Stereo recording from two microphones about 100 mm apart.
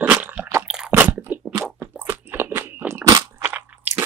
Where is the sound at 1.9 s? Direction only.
20° right (ahead or behind).